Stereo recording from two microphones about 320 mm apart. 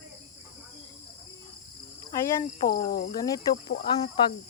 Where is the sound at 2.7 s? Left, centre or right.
Left.